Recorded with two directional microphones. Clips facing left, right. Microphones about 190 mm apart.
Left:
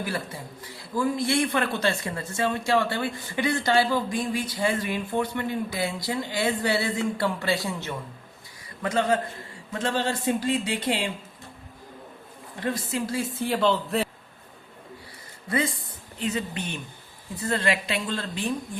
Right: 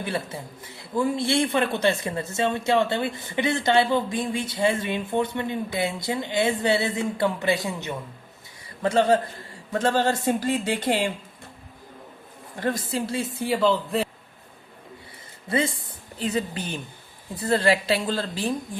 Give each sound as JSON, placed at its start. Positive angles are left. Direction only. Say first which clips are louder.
{"t": 0.0, "sound": "a woman's voice", "louder": "right 2 dB", "side_deg": -25}
{"t": 8.8, "sound": "a woman's voice", "louder": "right 4 dB", "side_deg": -30}
{"t": 9.7, "sound": "speech", "louder": "right 5 dB", "side_deg": -45}
{"t": 12.9, "sound": "speech", "louder": "right 1 dB", "side_deg": -35}
{"t": 13.5, "sound": "speech", "louder": "right 2 dB", "side_deg": 0}
{"t": 15.4, "sound": "a woman's voice", "louder": "right 2 dB", "side_deg": -25}